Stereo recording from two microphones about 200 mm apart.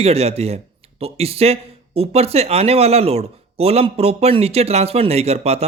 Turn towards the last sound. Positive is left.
turn(degrees=-30)  # may be behind; listen again after turning